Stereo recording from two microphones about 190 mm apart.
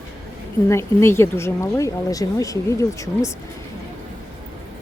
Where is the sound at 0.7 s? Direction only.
15° left (ahead or behind).